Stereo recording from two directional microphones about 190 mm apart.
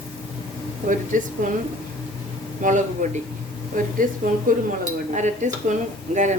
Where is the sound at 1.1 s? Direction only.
45° right (ahead or behind).